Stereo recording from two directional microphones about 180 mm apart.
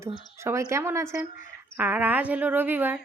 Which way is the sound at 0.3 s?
15° right (ahead or behind).